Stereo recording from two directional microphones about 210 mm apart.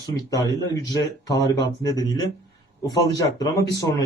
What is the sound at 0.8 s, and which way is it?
Speech, 15° left (ahead or behind).